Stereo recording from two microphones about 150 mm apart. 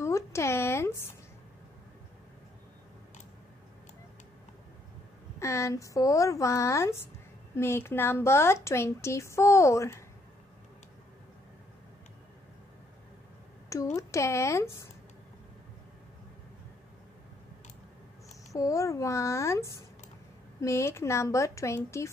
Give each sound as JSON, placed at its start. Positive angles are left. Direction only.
{"t": 0.0, "sound": "a sound", "side_deg": 20}
{"t": 5.4, "sound": "a woman's voice", "side_deg": 20}
{"t": 13.9, "sound": "speech", "side_deg": 20}
{"t": 18.5, "sound": "speech", "side_deg": 20}